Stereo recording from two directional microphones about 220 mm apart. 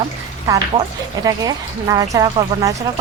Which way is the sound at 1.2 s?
15° right (ahead or behind).